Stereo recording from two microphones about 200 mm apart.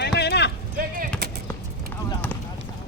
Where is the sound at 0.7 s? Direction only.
45° right (ahead or behind).